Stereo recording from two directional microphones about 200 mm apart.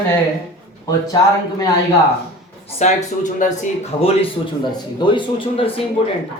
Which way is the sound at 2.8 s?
40° left (ahead or behind).